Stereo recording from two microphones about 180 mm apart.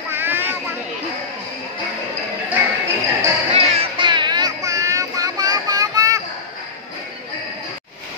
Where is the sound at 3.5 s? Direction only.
35° right (ahead or behind).